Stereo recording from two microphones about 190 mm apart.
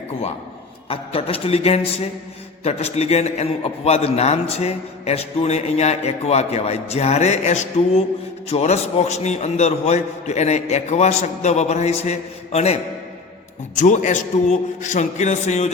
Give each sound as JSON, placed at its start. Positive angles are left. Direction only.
{"t": 0.9, "sound": "a man's voice", "side_deg": 30}
{"t": 13.7, "sound": "a man's voice", "side_deg": 40}